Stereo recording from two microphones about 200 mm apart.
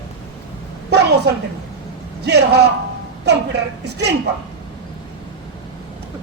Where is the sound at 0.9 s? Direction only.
55° right (ahead or behind).